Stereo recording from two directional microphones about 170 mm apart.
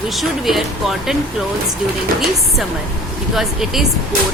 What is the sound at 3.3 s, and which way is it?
Speech, centre (ahead or behind).